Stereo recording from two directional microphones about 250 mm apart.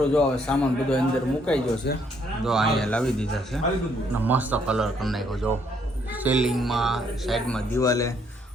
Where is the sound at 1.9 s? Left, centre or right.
Left.